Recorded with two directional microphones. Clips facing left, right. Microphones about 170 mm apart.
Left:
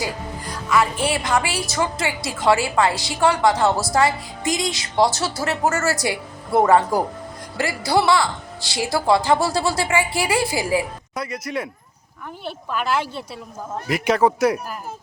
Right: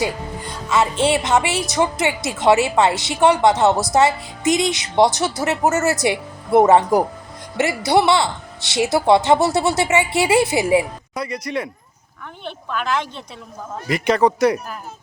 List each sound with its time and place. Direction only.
0.0 s a woman's voice: 25° right (ahead or behind)
11.1 s speech: centre (ahead or behind)